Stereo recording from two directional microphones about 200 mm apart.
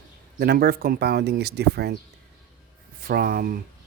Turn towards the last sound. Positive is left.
turn(degrees=-45)  # may be behind; listen again after turning